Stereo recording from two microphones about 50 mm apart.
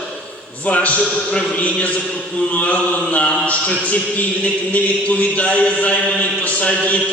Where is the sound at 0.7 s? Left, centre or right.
Left.